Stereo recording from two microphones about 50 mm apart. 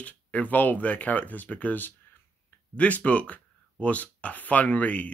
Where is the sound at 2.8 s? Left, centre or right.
Left.